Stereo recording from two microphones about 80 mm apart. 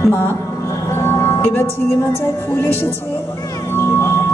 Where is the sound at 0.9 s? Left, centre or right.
Left.